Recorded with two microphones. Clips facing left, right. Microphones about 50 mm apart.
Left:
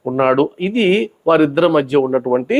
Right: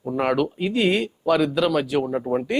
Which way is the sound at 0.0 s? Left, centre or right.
Left.